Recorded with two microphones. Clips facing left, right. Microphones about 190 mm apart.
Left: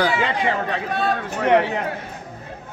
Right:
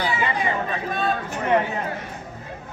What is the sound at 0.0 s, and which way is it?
Speech, 85° left.